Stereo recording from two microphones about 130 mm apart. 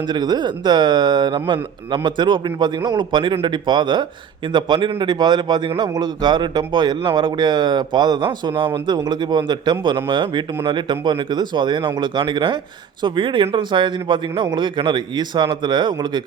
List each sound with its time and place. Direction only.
0.1 s a man's voice: 30° right (ahead or behind)